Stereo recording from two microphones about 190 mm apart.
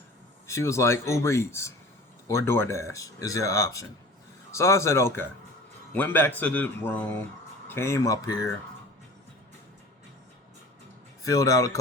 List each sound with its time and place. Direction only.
0.4 s speech: 15° left (ahead or behind)
11.3 s speech: 20° left (ahead or behind)